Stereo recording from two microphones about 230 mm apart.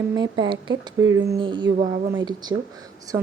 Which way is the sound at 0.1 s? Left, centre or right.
Centre.